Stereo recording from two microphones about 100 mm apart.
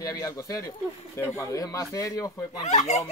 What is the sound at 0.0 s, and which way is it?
Fowl, 35° left (ahead or behind).